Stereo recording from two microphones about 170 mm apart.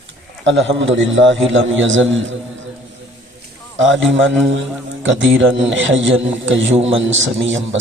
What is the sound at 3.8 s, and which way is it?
A man's voice, 90° right.